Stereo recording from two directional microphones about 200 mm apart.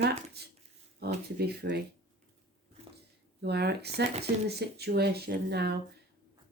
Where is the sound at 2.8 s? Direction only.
35° right (ahead or behind).